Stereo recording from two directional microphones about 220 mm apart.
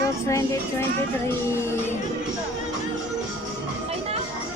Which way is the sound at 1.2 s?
10° left (ahead or behind).